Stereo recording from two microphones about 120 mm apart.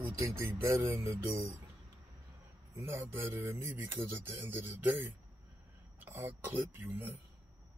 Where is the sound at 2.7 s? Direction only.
25° right (ahead or behind).